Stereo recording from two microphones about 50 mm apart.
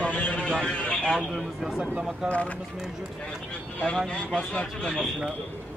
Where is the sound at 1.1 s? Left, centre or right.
Centre.